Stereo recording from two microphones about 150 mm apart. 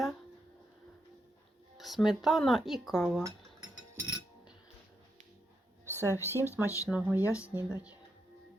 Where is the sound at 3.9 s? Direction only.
10° right (ahead or behind).